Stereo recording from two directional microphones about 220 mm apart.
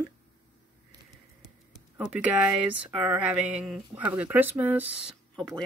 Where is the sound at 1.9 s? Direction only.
5° right (ahead or behind).